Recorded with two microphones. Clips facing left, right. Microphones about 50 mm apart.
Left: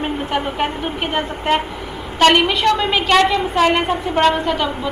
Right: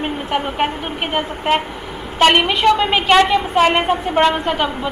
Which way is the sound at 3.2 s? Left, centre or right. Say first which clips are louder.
Right 1 dB; centre.